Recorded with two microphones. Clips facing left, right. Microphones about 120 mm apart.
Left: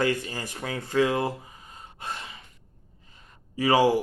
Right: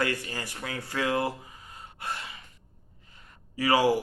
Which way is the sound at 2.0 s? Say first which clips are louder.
Even; 20° left (ahead or behind).